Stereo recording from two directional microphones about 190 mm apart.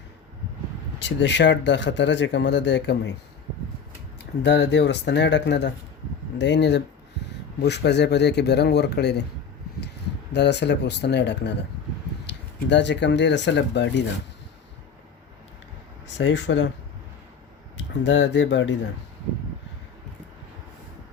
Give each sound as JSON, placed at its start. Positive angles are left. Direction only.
{"t": 0.9, "sound": "speech", "side_deg": 70}
{"t": 4.4, "sound": "speech", "side_deg": 65}
{"t": 10.3, "sound": "speech", "side_deg": 65}
{"t": 16.1, "sound": "speech", "side_deg": 70}
{"t": 18.0, "sound": "speech", "side_deg": 70}